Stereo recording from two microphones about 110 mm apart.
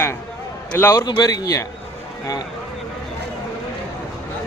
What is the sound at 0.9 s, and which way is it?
Speech, 40° left (ahead or behind).